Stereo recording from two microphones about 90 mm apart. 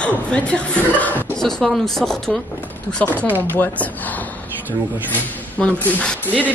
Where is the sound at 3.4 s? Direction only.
20° left (ahead or behind).